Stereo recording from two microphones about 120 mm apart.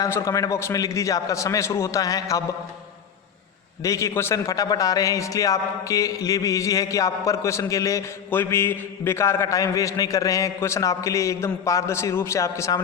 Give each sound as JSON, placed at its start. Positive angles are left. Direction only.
{"t": 0.0, "sound": "a man's voice", "side_deg": 25}
{"t": 3.8, "sound": "a man's voice", "side_deg": 25}